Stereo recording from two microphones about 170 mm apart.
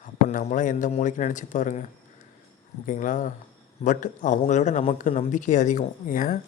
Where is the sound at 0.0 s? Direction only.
50° left (ahead or behind).